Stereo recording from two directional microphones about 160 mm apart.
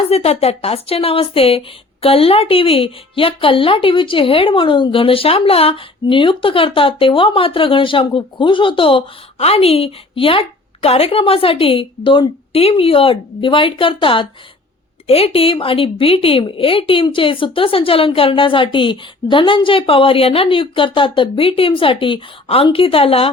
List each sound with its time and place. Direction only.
0.1 s speech: 40° left (ahead or behind)